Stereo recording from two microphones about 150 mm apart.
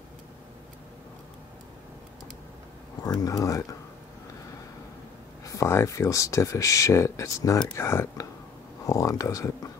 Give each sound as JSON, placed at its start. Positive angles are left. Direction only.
{"t": 3.0, "sound": "speech", "side_deg": 25}
{"t": 5.4, "sound": "speech", "side_deg": 20}